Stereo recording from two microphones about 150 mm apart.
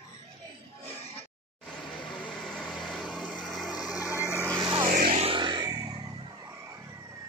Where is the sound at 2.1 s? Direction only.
5° left (ahead or behind).